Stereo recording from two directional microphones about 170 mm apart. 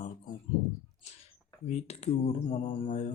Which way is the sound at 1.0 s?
40° left (ahead or behind).